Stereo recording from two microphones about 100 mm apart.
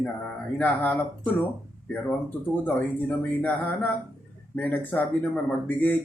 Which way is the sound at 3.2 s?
20° left (ahead or behind).